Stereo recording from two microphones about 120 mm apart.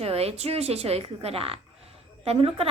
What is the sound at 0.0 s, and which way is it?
A woman's voice, 60° right (ahead or behind).